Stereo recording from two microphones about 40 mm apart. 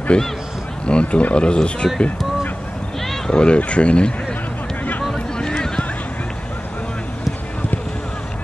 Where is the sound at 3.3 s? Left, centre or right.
Left.